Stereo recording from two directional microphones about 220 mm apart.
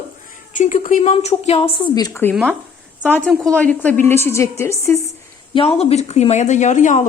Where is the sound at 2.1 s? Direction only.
10° left (ahead or behind).